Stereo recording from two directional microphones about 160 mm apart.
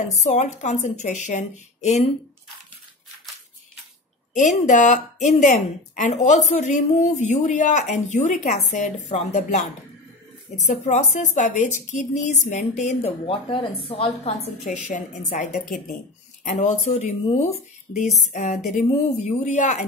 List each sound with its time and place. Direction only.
0.0 s a woman's voice: 45° left (ahead or behind)
4.3 s a woman's voice: 50° left (ahead or behind)